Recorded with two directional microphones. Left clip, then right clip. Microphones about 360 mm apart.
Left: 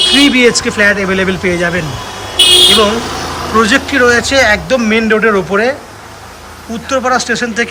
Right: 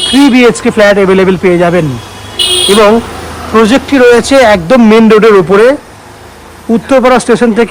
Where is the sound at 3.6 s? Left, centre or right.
Centre.